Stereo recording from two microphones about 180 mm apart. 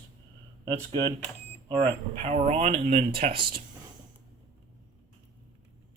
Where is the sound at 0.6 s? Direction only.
25° right (ahead or behind).